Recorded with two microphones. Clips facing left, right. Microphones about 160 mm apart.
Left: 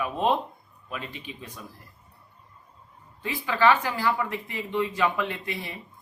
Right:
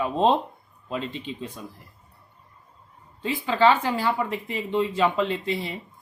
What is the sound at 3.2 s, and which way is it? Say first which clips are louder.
Speech: right 3 dB; 25° right (ahead or behind).